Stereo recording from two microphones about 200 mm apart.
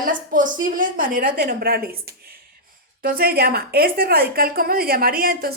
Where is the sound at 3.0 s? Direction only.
50° right (ahead or behind).